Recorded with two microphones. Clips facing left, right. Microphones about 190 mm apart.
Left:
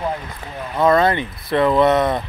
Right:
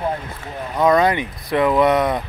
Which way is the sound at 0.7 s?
15° right (ahead or behind).